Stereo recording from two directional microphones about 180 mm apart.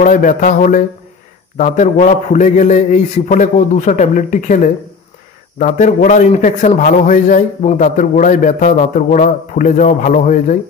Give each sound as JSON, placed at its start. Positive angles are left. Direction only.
{"t": 0.0, "sound": "a man's voice", "side_deg": 45}